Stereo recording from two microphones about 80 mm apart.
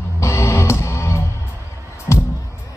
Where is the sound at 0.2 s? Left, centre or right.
Left.